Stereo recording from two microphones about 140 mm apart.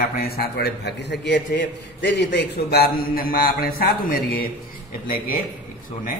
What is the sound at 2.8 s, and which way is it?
A man's voice, 90° left.